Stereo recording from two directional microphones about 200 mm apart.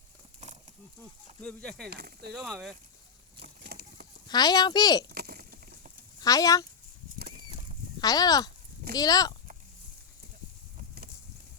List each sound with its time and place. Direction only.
1.4 s speech: 5° left (ahead or behind)
1.9 s speech: 55° right (ahead or behind)
2.3 s speech: centre (ahead or behind)
3.4 s a sound: 55° right (ahead or behind)
4.3 s speech: 20° left (ahead or behind)
5.0 s a sound: 50° right (ahead or behind)
6.1 s speech: 20° left (ahead or behind)
7.2 s bird flight: 50° right (ahead or behind)
8.0 s speech: 20° left (ahead or behind)
10.8 s a sound: 50° right (ahead or behind)